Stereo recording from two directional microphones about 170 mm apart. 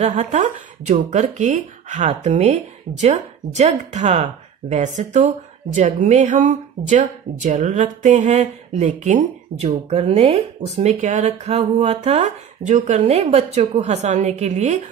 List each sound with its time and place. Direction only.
0.0 s speech: 40° right (ahead or behind)